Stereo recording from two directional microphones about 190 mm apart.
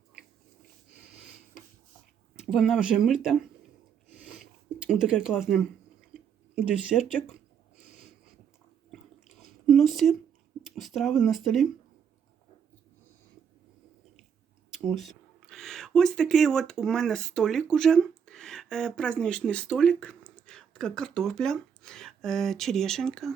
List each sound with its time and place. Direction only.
2.3 s speech: 5° right (ahead or behind)
4.1 s a sound: centre (ahead or behind)
4.9 s speech: 5° right (ahead or behind)
6.1 s a sound: 5° right (ahead or behind)
7.8 s snort: 40° left (ahead or behind)
8.9 s drip: centre (ahead or behind)
10.6 s speech: centre (ahead or behind)
14.8 s speech: centre (ahead or behind)